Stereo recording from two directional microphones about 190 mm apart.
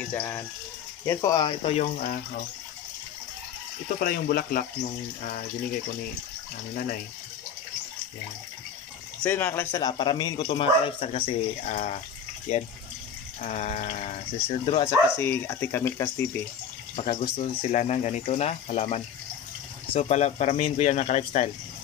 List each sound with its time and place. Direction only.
0.1 s speech: 10° left (ahead or behind); by 2.1 s 40° left (ahead or behind)
4.0 s speech: 50° left (ahead or behind)
9.2 s speech: 10° left (ahead or behind); by 12.0 s 40° left (ahead or behind)
13.4 s speech: 40° left (ahead or behind)
14.9 s speech: 10° left (ahead or behind)
16.9 s speech: 35° left (ahead or behind)